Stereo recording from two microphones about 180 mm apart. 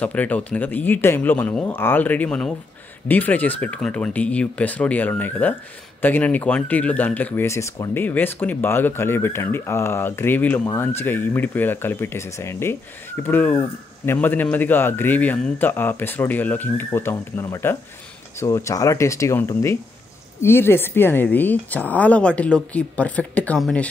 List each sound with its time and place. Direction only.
0.0 s speech: 10° left (ahead or behind)